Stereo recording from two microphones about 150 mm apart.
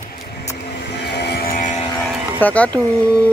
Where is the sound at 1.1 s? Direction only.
90° left; by 1.8 s 60° left (ahead or behind).